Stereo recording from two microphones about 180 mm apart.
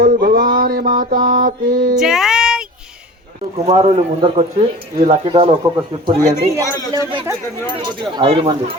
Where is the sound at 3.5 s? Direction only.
35° right (ahead or behind).